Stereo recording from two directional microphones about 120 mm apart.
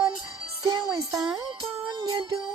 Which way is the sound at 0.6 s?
30° right (ahead or behind).